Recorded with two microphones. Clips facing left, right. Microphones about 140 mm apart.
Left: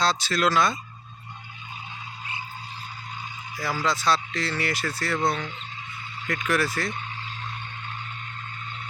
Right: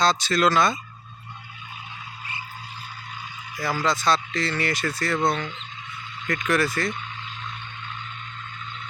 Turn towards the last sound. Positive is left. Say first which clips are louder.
# right 2 dB
turn(degrees=5)  # may be behind; listen again after turning